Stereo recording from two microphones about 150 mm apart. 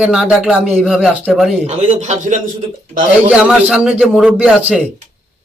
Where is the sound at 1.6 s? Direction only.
50° right (ahead or behind).